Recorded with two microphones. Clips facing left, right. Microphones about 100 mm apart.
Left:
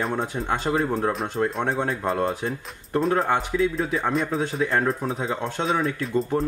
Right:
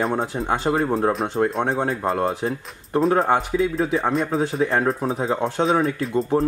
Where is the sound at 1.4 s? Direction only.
25° right (ahead or behind).